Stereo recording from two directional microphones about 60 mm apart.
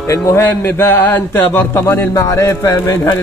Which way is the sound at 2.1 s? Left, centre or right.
Left.